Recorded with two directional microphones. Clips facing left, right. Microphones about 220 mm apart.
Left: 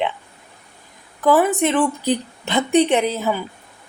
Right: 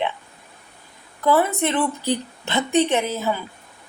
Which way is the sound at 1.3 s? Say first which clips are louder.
Left 4 dB; 15° left (ahead or behind).